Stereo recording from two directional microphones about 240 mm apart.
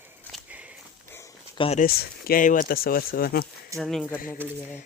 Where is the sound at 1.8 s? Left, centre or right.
Left.